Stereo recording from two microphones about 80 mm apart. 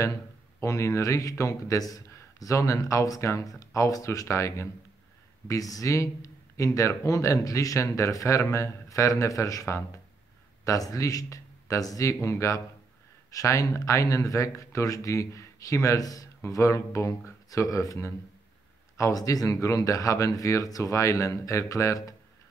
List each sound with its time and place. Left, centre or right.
0.0 s speech: left